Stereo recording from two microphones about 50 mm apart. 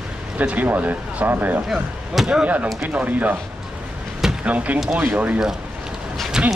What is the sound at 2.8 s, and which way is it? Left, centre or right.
Speech, right.